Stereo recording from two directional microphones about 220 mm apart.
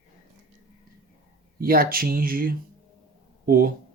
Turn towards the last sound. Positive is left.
turn(degrees=-45)  # may be behind; listen again after turning